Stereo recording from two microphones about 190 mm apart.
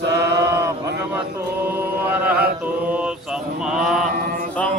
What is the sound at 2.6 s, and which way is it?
Mantra, 10° right (ahead or behind).